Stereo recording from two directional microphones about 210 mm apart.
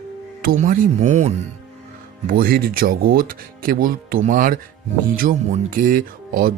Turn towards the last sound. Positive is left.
turn(degrees=-40)  # may be behind; listen again after turning